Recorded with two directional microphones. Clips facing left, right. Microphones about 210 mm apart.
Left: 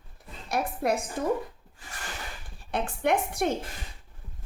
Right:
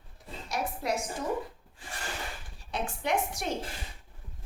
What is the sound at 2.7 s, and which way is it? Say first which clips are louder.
Speech: left 5 dB; 55° left (ahead or behind).